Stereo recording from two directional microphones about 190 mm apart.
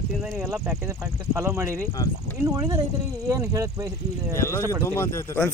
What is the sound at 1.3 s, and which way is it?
Speech, 15° right (ahead or behind).